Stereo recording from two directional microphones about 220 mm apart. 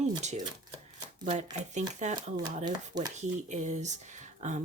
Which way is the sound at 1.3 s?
30° right (ahead or behind).